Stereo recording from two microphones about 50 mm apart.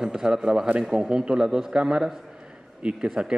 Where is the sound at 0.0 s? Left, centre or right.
Centre.